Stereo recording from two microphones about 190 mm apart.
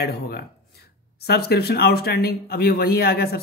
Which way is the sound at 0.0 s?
55° left (ahead or behind).